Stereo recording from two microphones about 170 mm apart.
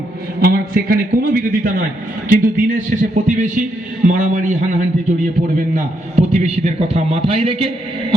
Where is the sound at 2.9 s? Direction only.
50° right (ahead or behind).